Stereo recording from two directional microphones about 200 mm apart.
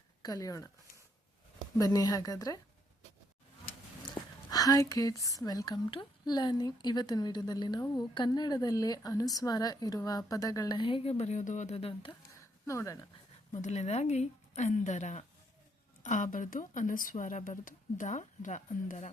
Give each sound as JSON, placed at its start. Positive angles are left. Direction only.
{"t": 0.2, "sound": "a woman's voice", "side_deg": 15}
{"t": 1.8, "sound": "a woman's voice", "side_deg": 15}
{"t": 4.5, "sound": "speech", "side_deg": 20}
{"t": 12.6, "sound": "a woman's voice", "side_deg": 15}
{"t": 13.5, "sound": "speech", "side_deg": 35}